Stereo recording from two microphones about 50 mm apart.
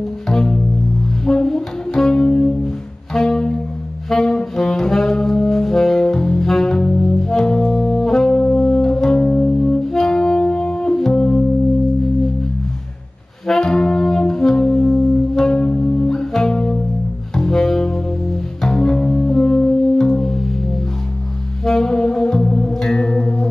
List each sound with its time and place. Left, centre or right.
0.3 s music: centre
3.1 s bowed string instrument: centre
4.1 s saxophone: centre
6.5 s brass instrument: centre
13.5 s brass instrument: centre
17.3 s double bass: centre
21.6 s music: centre